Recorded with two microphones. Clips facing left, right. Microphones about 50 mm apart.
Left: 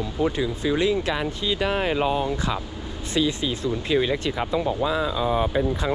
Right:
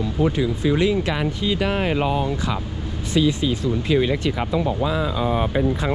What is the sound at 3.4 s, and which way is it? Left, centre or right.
Speech, right.